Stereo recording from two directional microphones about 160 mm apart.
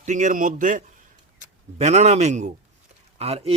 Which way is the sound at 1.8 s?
45° right (ahead or behind).